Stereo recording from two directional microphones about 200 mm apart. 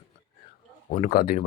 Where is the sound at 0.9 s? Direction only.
40° left (ahead or behind).